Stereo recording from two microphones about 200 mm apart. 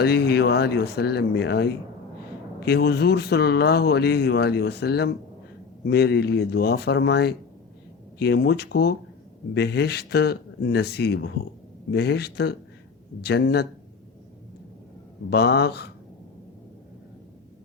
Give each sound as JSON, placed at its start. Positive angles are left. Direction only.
{"t": 0.0, "sound": "speech", "side_deg": 55}
{"t": 15.3, "sound": "speech", "side_deg": 55}